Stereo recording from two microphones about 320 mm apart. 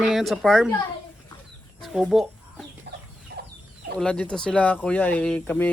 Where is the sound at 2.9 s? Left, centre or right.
Right.